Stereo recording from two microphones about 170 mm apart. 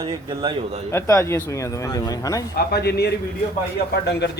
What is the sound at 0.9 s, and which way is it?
Speech, 15° left (ahead or behind).